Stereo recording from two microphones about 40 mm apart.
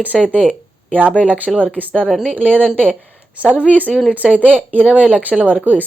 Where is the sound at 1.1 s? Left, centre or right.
Left.